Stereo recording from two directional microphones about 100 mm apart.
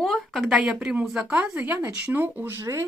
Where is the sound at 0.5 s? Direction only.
10° right (ahead or behind).